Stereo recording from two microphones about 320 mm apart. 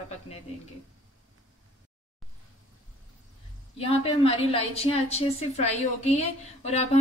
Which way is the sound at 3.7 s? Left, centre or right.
Centre.